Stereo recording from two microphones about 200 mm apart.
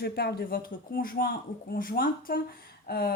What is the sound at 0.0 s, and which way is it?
Speech, 50° left (ahead or behind).